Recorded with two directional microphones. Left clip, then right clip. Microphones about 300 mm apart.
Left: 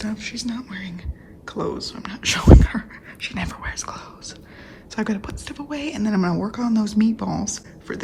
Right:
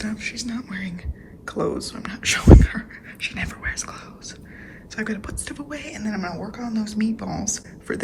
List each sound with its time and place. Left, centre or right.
0.0 s a woman's voice: centre